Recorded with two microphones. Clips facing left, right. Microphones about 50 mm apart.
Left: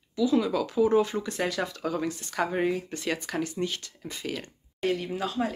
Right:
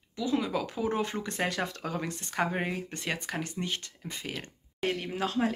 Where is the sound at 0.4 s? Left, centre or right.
Right.